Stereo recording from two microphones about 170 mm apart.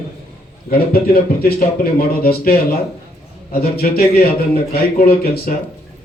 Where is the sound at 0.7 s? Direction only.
65° left (ahead or behind).